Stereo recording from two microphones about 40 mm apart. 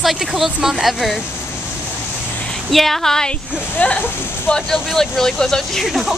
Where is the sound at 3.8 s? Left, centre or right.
Left.